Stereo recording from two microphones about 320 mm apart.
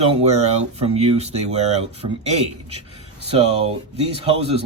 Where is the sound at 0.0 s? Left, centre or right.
Centre.